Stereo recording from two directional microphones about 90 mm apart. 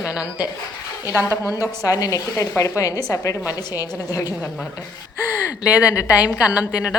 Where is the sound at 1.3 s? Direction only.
35° left (ahead or behind).